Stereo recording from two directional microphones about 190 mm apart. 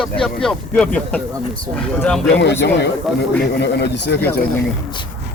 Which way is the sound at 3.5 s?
65° left (ahead or behind).